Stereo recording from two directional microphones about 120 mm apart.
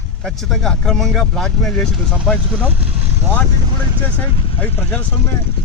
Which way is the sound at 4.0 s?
10° left (ahead or behind).